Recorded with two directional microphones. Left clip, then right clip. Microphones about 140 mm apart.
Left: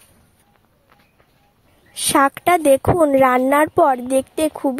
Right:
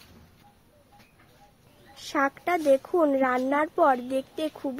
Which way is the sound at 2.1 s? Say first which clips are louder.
Left 11 dB; 90° left.